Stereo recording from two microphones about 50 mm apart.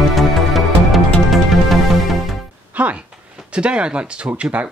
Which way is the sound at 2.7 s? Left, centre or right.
Right.